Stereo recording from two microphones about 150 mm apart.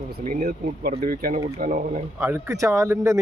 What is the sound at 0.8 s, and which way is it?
Speech, 75° right (ahead or behind).